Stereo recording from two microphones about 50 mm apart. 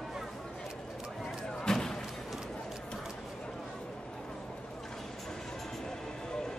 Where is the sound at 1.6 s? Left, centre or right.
Centre.